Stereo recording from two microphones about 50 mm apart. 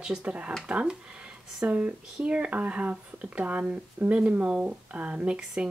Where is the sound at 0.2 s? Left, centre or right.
Right.